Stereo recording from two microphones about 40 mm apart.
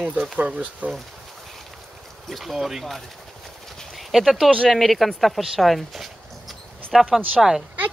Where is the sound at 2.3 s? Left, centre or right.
Centre.